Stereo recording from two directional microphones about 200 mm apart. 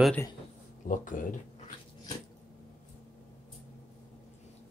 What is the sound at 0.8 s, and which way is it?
Speech, 40° left (ahead or behind).